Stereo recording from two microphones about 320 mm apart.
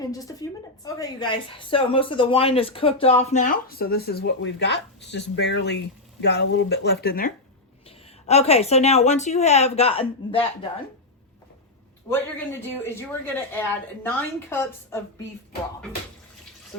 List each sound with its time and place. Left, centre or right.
0.0 s a woman's voice: centre
12.0 s a man's voice: centre